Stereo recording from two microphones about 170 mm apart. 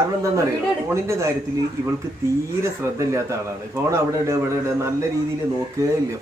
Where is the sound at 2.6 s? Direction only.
15° right (ahead or behind).